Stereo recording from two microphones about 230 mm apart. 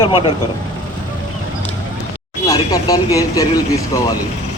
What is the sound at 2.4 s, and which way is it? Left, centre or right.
Speech, centre.